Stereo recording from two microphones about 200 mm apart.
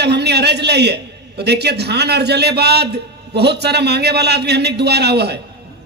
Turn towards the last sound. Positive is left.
turn(degrees=-55)  # may be behind; listen again after turning